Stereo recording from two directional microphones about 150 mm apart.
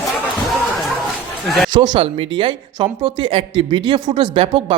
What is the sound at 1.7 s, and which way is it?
A woman's voice, 30° right (ahead or behind).